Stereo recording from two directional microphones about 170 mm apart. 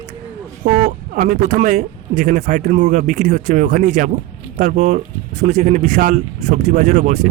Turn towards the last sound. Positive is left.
turn(degrees=-45)  # may be behind; listen again after turning